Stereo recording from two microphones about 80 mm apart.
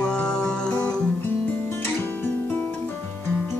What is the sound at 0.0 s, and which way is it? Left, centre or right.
Music, centre.